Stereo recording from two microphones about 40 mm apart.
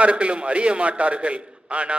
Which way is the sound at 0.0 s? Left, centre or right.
Right.